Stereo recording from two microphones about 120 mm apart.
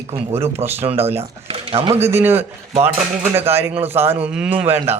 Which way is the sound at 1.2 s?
55° right (ahead or behind).